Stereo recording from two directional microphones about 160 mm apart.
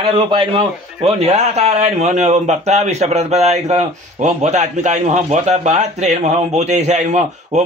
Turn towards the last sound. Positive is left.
turn(degrees=-45)  # may be behind; listen again after turning